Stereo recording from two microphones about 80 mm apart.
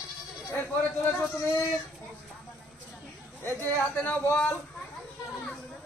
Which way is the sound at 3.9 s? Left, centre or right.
Centre.